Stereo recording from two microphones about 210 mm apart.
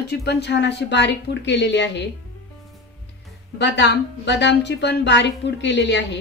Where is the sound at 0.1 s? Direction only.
50° left (ahead or behind).